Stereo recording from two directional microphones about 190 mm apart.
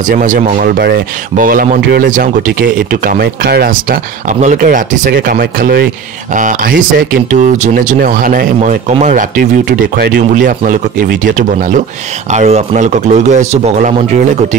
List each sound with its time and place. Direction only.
0.0 s a man's voice: 45° right (ahead or behind)